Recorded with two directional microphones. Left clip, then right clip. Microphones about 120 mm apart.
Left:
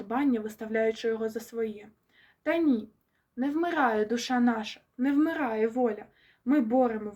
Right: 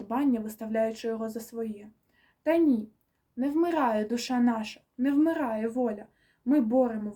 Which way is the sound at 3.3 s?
35° right (ahead or behind).